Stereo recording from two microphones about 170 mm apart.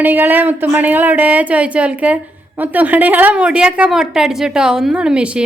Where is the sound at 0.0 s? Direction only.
10° right (ahead or behind).